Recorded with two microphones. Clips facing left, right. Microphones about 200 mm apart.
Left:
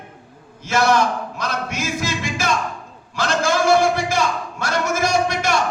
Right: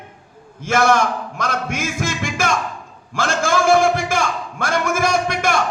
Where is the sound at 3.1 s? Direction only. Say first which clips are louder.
Right 1 dB; 50° right (ahead or behind).